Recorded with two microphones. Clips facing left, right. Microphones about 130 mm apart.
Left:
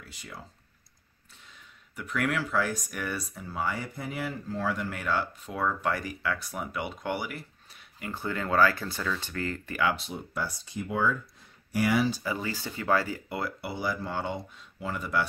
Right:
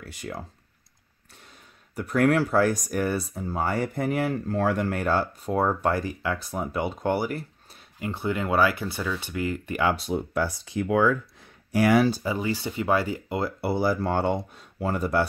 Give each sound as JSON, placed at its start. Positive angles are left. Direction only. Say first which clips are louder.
{"t": 0.1, "sound": "speech", "louder": "right 11 dB", "side_deg": -55}
{"t": 2.0, "sound": "speech", "louder": "right 8 dB", "side_deg": -40}
{"t": 3.9, "sound": "speech", "louder": "right 9 dB", "side_deg": -55}
{"t": 8.0, "sound": "speech", "louder": "right 5 dB", "side_deg": -15}
{"t": 9.8, "sound": "speech", "louder": "right 3 dB", "side_deg": -35}
{"t": 10.1, "sound": "speech", "louder": "right 8 dB", "side_deg": -60}
{"t": 12.2, "sound": "speech", "louder": "right 5 dB", "side_deg": -20}
{"t": 13.6, "sound": "speech", "louder": "right 8 dB", "side_deg": -35}
{"t": 14.1, "sound": "speech", "louder": "right 8 dB", "side_deg": -50}